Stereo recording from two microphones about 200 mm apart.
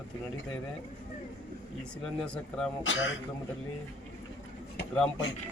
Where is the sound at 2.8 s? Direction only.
70° left (ahead or behind).